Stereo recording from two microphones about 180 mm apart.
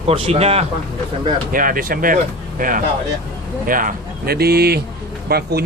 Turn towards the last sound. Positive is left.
turn(degrees=-60)  # may be behind; listen again after turning